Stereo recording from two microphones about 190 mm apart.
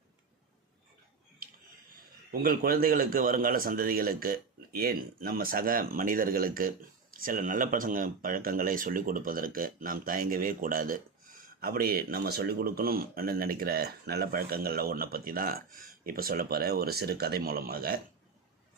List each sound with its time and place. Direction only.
2.3 s a man's voice: 50° right (ahead or behind)